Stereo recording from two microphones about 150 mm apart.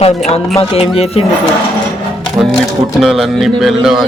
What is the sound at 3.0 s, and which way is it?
Speech, centre (ahead or behind).